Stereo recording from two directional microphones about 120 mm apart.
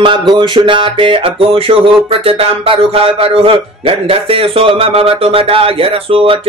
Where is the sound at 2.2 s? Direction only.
55° right (ahead or behind).